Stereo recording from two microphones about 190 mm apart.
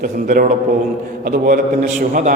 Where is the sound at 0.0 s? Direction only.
45° right (ahead or behind).